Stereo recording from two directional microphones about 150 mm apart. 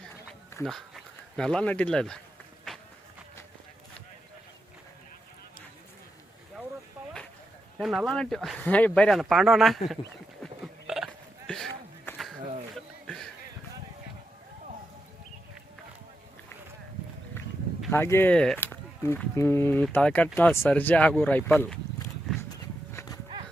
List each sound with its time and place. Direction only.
0.6 s speech: centre (ahead or behind)
2.7 s run: centre (ahead or behind)
7.8 s speech: centre (ahead or behind)
10.4 s hiccup: centre (ahead or behind)
17.9 s speech: 15° left (ahead or behind)
22.9 s livestock: 20° left (ahead or behind)